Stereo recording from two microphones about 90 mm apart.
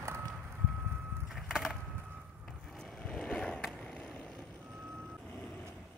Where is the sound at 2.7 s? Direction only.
10° left (ahead or behind).